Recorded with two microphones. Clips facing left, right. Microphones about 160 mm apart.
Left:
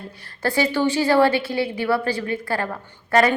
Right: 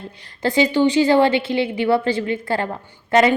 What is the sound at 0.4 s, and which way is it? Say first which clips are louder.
A woman's voice: right 4 dB; 20° right (ahead or behind).